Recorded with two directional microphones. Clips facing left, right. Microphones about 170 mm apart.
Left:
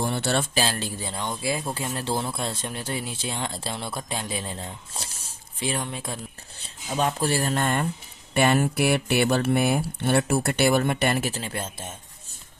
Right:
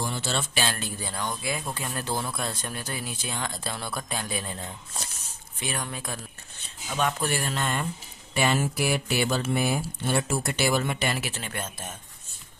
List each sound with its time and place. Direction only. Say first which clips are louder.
0.0 s speech: left 5 dB; 60° left (ahead or behind)
0.5 s speech: left 3 dB; 30° left (ahead or behind)
7.5 s speech: left 5 dB; 50° left (ahead or behind)
11.3 s speech: left 4 dB; 30° left (ahead or behind)